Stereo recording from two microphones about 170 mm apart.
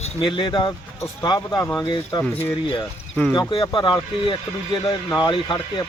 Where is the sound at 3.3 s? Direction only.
30° left (ahead or behind).